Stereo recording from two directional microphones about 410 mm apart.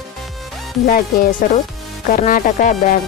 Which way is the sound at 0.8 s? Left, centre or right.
Left.